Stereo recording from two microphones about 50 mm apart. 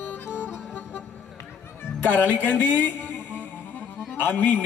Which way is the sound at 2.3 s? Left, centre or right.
Left.